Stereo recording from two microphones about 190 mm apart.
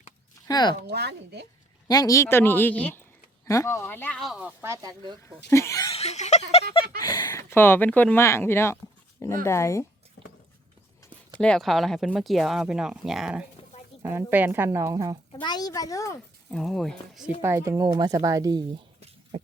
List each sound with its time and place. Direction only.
0.4 s a woman's voice: 20° left (ahead or behind)
0.9 s a woman's voice: 60° right (ahead or behind)
1.9 s speech: 20° left (ahead or behind); by 4.5 s centre (ahead or behind)
4.6 s speech: 15° right (ahead or behind)
5.5 s speech: 15° left (ahead or behind)
5.9 s a sound: 35° left (ahead or behind)
7.0 s speech: 20° left (ahead or behind)
11.3 s speech: 5° left (ahead or behind); by 15.2 s 20° right (ahead or behind)
15.3 s a woman's voice: 20° left (ahead or behind)
16.5 s speech: 5° left (ahead or behind)
17.4 s speech: 15° right (ahead or behind)
18.9 s a sound: 35° right (ahead or behind)